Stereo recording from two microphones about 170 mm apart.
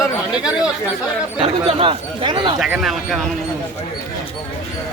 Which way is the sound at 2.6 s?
Centre (ahead or behind).